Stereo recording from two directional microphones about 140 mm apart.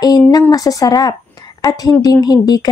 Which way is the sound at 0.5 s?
25° left (ahead or behind).